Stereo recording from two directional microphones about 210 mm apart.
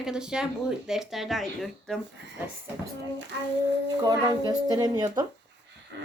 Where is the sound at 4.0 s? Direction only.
20° right (ahead or behind).